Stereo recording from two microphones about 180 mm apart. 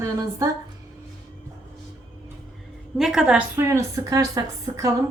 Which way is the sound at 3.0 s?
5° right (ahead or behind).